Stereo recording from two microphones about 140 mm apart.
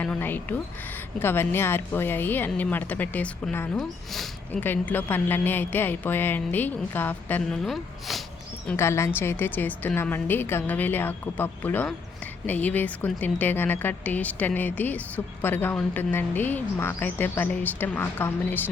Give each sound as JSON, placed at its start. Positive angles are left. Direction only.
{"t": 0.0, "sound": "a woman's voice", "side_deg": 10}
{"t": 3.8, "sound": "speech", "side_deg": 0}
{"t": 4.6, "sound": "a woman's voice", "side_deg": 15}
{"t": 8.6, "sound": "a woman's voice", "side_deg": 20}